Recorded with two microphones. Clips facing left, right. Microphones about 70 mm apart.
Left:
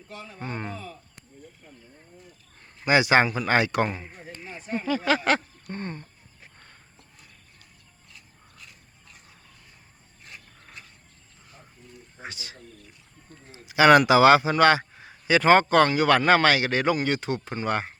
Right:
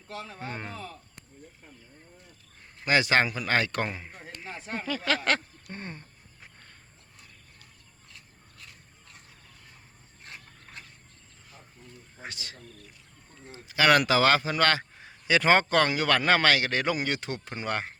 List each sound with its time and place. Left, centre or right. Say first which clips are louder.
0.1 s speech: right 2 dB; right
0.3 s speech: left 6 dB; centre
2.8 s speech: left 4 dB; centre
4.4 s a sound: left 4 dB; right
4.9 s speech: left 5 dB; centre
5.6 s speech: left 6 dB; centre
12.2 s speech: left 2 dB; centre
13.7 s a sound: left 6 dB; centre
14.1 s a man's voice: left 7 dB; centre